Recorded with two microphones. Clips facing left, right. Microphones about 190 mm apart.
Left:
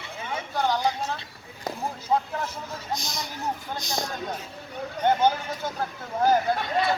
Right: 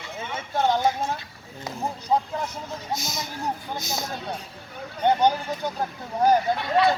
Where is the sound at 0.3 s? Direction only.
25° right (ahead or behind).